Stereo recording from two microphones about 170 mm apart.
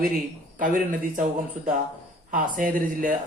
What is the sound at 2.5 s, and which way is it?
Speech, 55° right (ahead or behind).